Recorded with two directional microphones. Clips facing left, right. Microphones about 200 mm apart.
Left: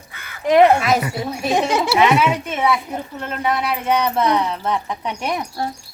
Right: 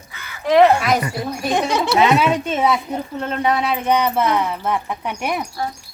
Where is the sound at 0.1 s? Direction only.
50° left (ahead or behind).